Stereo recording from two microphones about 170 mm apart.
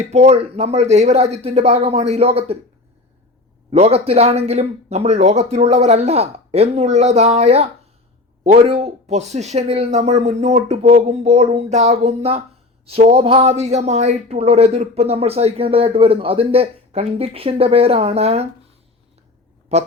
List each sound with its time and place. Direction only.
0.0 s speech: 40° right (ahead or behind)
3.7 s speech: 35° right (ahead or behind)
19.7 s speech: 40° right (ahead or behind)